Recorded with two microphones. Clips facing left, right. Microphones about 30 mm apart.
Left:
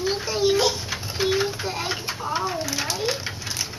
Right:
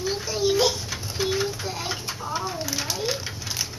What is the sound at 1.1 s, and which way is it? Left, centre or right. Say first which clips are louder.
Pigeon: left 3 dB; centre.